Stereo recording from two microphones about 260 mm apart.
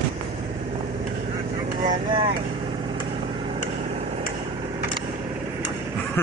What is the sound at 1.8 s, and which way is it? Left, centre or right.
Vehicle, right.